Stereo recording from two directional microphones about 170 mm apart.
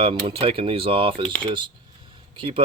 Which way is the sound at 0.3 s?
35° right (ahead or behind).